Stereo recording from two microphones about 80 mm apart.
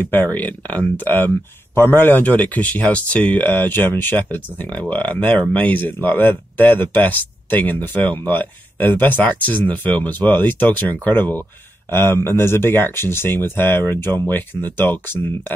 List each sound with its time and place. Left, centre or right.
0.0 s speech: left